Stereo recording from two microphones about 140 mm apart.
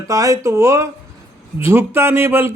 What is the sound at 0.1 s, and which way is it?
A man's voice, 25° right (ahead or behind).